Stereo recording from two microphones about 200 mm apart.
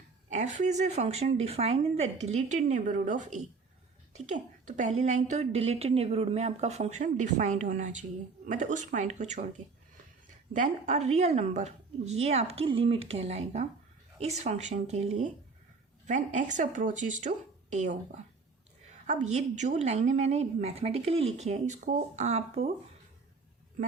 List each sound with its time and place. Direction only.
0.3 s a woman's voice: 35° right (ahead or behind)
10.5 s a woman's voice: 35° right (ahead or behind)